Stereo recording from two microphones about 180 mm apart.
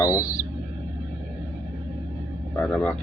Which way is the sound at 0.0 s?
15° left (ahead or behind).